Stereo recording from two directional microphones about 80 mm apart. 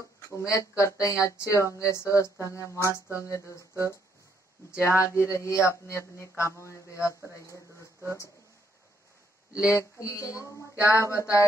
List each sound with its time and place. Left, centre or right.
0.3 s speech: left
9.7 s speech: left
10.8 s speech: right
11.1 s speech: left